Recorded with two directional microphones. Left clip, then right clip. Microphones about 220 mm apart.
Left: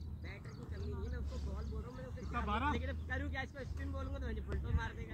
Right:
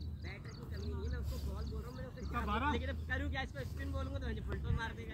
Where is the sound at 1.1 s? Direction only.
40° right (ahead or behind).